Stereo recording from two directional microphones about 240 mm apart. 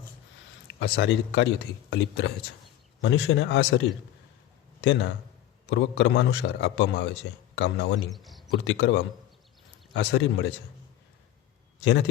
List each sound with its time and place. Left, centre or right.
0.7 s a man's voice: left
8.1 s speech: centre
8.4 s speech: left
11.8 s a man's voice: left